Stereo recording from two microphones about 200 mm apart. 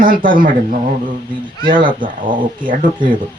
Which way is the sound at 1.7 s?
45° right (ahead or behind).